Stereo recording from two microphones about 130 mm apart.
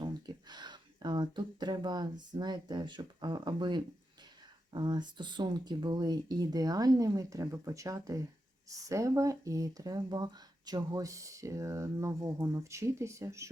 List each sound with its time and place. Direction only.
0.0 s speech: 35° right (ahead or behind)